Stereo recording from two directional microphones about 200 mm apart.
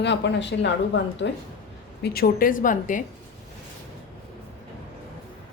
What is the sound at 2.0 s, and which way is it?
A woman's voice, 50° left (ahead or behind).